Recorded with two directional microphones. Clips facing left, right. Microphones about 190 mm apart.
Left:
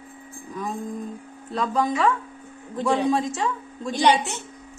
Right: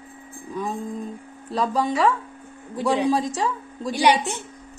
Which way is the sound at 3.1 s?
35° right (ahead or behind).